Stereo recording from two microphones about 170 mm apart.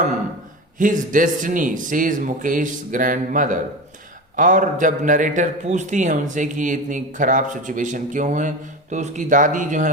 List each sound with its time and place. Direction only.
0.8 s a man's voice: 50° right (ahead or behind)